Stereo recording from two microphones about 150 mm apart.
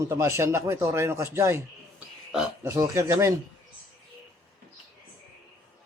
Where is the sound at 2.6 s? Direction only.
20° right (ahead or behind).